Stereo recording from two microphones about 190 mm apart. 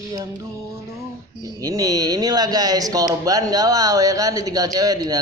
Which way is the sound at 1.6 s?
20° right (ahead or behind).